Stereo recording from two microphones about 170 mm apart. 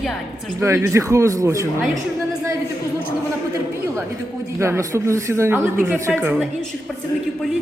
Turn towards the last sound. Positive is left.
turn(degrees=-15)  # may be behind; listen again after turning